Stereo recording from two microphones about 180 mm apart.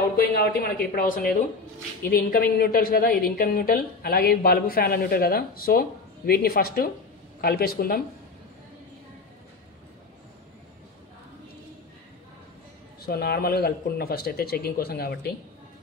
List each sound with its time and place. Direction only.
0.1 s a woman's voice: 60° left (ahead or behind)
13.0 s a woman's voice: 60° left (ahead or behind)